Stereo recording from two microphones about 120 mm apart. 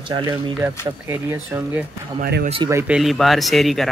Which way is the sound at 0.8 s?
20° right (ahead or behind).